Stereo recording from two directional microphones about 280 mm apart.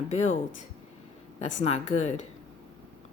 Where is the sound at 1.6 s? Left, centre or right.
Left.